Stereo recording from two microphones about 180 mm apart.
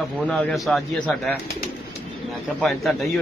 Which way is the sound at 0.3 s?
Centre (ahead or behind).